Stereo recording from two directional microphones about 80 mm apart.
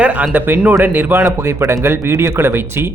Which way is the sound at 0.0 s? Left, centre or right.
Right.